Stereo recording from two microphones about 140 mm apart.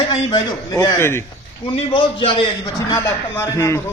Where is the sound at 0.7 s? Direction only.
25° left (ahead or behind).